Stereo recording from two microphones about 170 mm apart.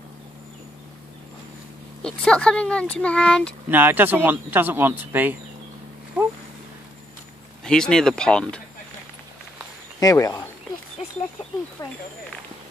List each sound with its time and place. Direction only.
2.0 s speech: 5° left (ahead or behind)
3.6 s speech: 10° right (ahead or behind)
7.6 s speech: 5° left (ahead or behind)
9.9 s speech: 20° left (ahead or behind)
11.8 s speech: 20° left (ahead or behind)